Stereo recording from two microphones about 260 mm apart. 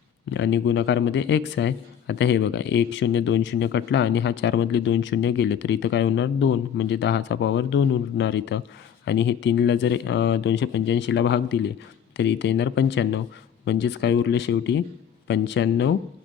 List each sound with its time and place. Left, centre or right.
0.3 s a man's voice: left